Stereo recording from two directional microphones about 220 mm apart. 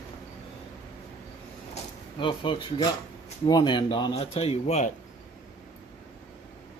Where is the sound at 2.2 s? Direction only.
25° left (ahead or behind).